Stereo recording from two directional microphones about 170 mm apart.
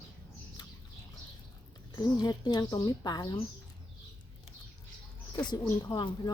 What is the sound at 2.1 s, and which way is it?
A woman's voice, 25° left (ahead or behind).